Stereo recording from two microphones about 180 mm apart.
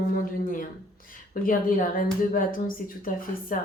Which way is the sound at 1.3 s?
50° left (ahead or behind).